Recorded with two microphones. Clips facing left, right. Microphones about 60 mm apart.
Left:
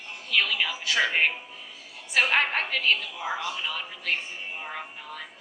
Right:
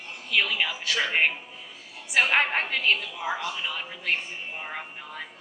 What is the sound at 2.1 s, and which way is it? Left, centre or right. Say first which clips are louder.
A woman's voice: right 1 dB; centre.